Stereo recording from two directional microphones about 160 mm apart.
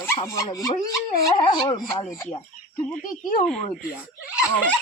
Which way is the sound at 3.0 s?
60° left (ahead or behind).